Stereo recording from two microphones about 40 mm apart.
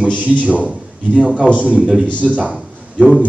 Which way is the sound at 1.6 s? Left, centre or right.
Right.